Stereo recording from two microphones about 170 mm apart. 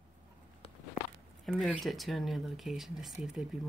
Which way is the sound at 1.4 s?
Centre (ahead or behind).